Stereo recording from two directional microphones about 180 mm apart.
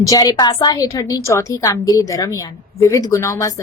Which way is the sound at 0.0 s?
20° left (ahead or behind).